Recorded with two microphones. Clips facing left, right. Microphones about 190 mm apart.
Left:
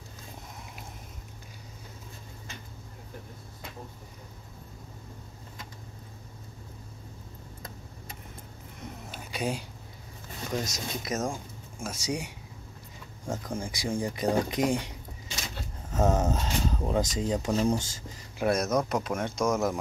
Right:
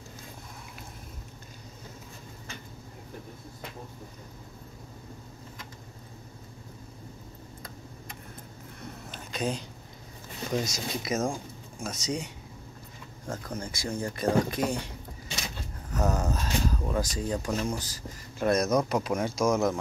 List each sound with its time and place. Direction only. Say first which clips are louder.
9.1 s a sound: right 1 dB; 10° left (ahead or behind)
10.6 s speech: right 2 dB; centre (ahead or behind)
11.8 s speech: even; 10° left (ahead or behind)
13.3 s speech: left 2 dB; 10° left (ahead or behind)
18.4 s speech: right 1 dB; 5° left (ahead or behind)